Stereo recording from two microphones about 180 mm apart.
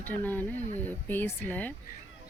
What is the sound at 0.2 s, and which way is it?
Speech, 10° left (ahead or behind).